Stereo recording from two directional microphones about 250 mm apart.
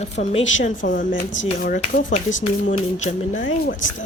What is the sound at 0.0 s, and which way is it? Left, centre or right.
Speech, left.